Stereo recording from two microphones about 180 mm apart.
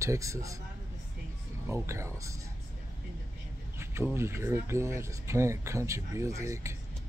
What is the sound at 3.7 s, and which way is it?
Speech, 15° right (ahead or behind).